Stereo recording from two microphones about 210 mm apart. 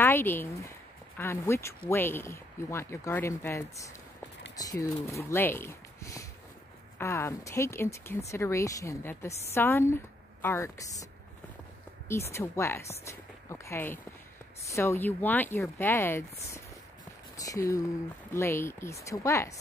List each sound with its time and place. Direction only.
0.0 s a sound: 10° left (ahead or behind)
1.1 s speech: 10° left (ahead or behind)
12.1 s speech: 10° left (ahead or behind)